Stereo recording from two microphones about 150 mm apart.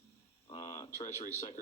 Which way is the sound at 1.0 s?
50° left (ahead or behind).